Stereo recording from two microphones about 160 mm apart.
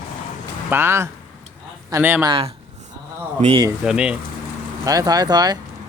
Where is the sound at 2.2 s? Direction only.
35° right (ahead or behind).